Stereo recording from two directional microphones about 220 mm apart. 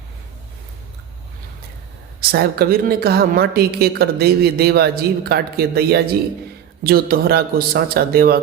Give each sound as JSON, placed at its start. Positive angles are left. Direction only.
{"t": 2.3, "sound": "a woman's voice", "side_deg": -45}